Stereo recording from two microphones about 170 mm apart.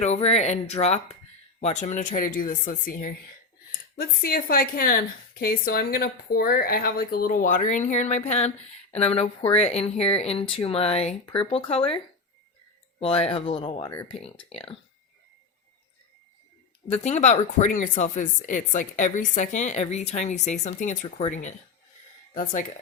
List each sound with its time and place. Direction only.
0.0 s a woman's voice: 40° left (ahead or behind)
13.0 s speech: 35° left (ahead or behind)
13.8 s speech: 15° left (ahead or behind)
14.5 s speech: 35° left (ahead or behind)
16.9 s a woman's voice: 40° left (ahead or behind)